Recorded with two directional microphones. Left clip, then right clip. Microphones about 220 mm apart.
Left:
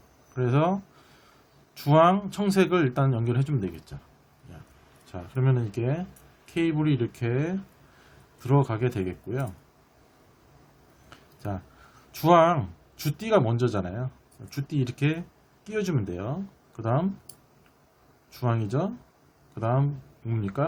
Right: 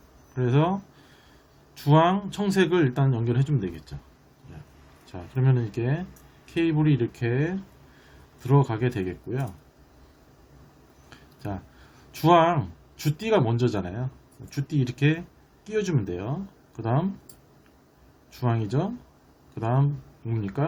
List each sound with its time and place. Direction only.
0.3 s speech: 15° left (ahead or behind)
5.1 s speech: 15° left (ahead or behind)
11.4 s speech: 10° left (ahead or behind)
18.3 s speech: 10° left (ahead or behind)